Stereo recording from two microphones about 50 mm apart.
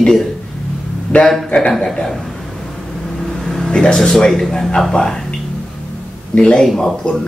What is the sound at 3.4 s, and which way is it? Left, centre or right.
Speech, centre.